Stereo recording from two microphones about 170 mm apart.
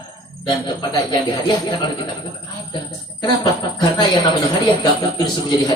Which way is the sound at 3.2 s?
25° left (ahead or behind).